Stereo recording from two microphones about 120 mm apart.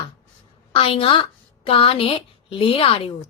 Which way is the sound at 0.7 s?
50° left (ahead or behind).